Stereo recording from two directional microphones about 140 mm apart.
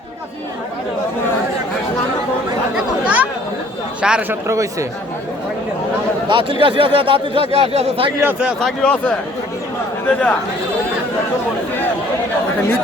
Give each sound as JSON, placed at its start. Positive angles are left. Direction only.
{"t": 2.7, "sound": "a sound", "side_deg": -5}
{"t": 4.0, "sound": "speech", "side_deg": -5}
{"t": 4.4, "sound": "speech", "side_deg": -20}
{"t": 6.2, "sound": "speech", "side_deg": -35}
{"t": 8.2, "sound": "speech", "side_deg": -10}
{"t": 8.8, "sound": "speech", "side_deg": 10}